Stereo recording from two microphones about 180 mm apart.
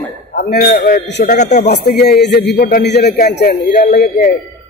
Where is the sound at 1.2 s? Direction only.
45° left (ahead or behind).